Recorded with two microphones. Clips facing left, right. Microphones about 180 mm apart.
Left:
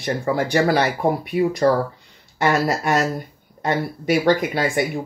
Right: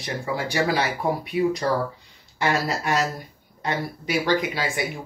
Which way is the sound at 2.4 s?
50° left (ahead or behind).